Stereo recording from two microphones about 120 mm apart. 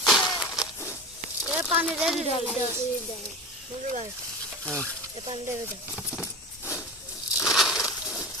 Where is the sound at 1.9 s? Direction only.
5° right (ahead or behind).